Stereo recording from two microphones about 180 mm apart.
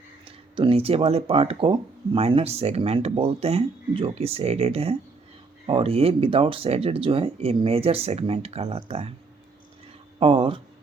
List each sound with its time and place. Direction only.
0.5 s speech: 30° right (ahead or behind)
10.2 s speech: 30° right (ahead or behind)